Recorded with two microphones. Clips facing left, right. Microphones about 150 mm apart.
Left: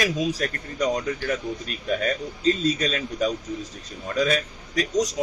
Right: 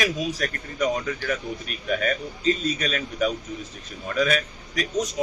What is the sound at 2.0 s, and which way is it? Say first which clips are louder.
A man's voice: left 1 dB; 35° left (ahead or behind).